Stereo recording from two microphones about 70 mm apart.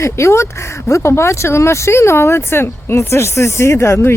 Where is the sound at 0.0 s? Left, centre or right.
Left.